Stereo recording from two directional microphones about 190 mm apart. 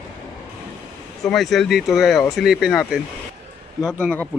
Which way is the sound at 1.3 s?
Centre (ahead or behind).